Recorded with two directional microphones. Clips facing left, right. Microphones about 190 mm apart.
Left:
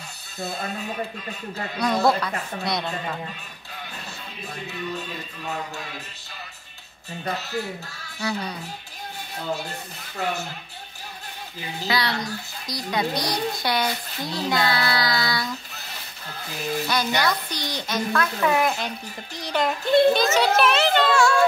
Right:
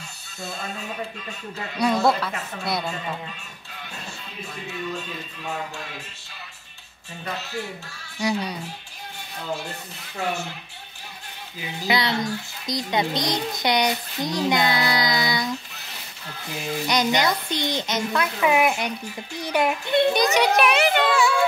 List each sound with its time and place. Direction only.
1.8 s speech: centre (ahead or behind)
8.2 s speech: 15° right (ahead or behind)
11.9 s a child's voice: 20° right (ahead or behind)
16.8 s a child's voice: 20° right (ahead or behind)